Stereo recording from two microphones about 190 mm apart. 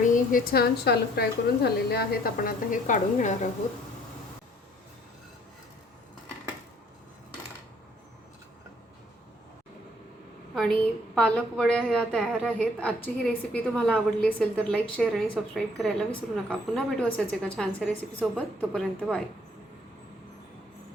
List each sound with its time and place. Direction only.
0.0 s a woman's voice: 45° left (ahead or behind)
10.5 s a woman's voice: 5° left (ahead or behind)